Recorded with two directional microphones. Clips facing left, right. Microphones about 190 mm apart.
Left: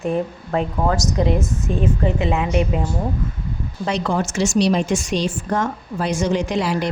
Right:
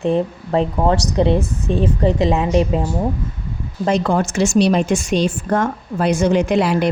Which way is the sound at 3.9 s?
50° right (ahead or behind).